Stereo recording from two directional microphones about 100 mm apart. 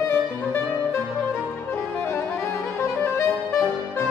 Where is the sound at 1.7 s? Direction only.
25° left (ahead or behind).